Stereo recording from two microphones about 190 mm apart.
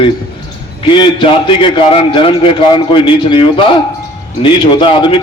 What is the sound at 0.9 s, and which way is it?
A man's voice, 25° left (ahead or behind).